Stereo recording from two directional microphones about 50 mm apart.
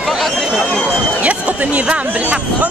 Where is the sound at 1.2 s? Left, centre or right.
Right.